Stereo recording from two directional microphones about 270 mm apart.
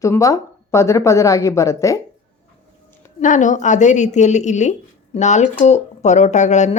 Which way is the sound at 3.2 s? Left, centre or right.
Left.